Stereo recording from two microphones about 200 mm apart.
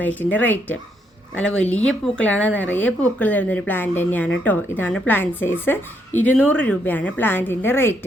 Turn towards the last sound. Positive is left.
turn(degrees=10)  # may be behind; listen again after turning